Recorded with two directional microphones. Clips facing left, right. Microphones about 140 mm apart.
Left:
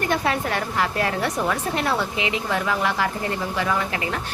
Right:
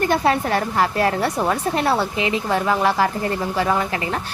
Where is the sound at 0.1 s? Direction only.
35° right (ahead or behind).